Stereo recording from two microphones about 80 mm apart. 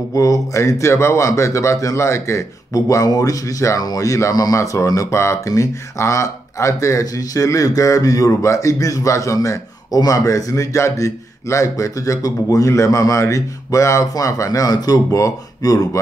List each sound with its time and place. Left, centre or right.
0.1 s speech: left